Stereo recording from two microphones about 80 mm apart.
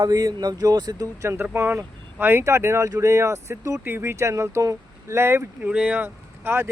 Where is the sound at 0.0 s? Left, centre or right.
Right.